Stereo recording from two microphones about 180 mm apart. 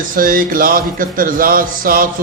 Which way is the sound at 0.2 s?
50° right (ahead or behind).